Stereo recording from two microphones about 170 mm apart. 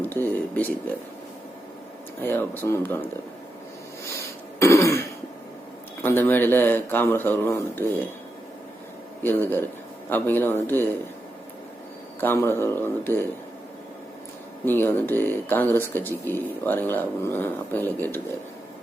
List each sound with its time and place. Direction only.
0.0 s speech: 10° left (ahead or behind)
2.2 s speech: 10° left (ahead or behind)
4.6 s throat clearing: 15° left (ahead or behind)
6.0 s speech: 10° left (ahead or behind)
9.2 s speech: 10° left (ahead or behind)
12.2 s speech: 10° left (ahead or behind)
14.6 s speech: 10° left (ahead or behind)